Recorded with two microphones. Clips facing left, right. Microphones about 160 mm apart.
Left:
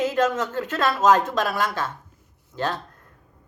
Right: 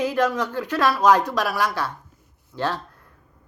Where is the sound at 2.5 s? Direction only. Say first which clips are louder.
Right 1 dB; 15° left (ahead or behind).